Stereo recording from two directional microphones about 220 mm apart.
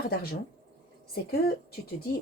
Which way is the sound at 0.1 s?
45° left (ahead or behind).